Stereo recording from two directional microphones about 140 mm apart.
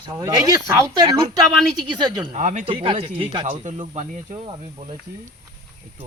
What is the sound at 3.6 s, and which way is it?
Speech, 55° right (ahead or behind).